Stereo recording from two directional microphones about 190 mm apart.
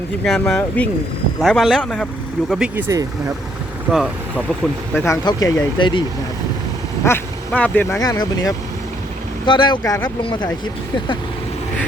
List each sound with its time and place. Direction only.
0.3 s a man's voice: centre (ahead or behind)
2.5 s speech: 5° right (ahead or behind)
3.9 s a man's voice: centre (ahead or behind)
4.9 s speech: 15° left (ahead or behind)
7.0 s speech: 10° left (ahead or behind)
9.5 s speech: 25° left (ahead or behind)